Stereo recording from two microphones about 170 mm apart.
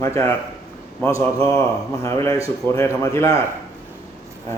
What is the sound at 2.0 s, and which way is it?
Speech, 20° left (ahead or behind).